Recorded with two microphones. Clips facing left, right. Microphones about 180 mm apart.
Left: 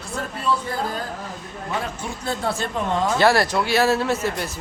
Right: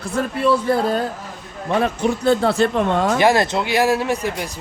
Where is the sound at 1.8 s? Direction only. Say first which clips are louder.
Right 11 dB; 70° right (ahead or behind).